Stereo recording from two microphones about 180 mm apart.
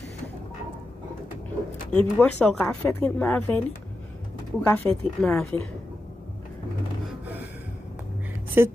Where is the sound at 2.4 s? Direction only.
10° left (ahead or behind).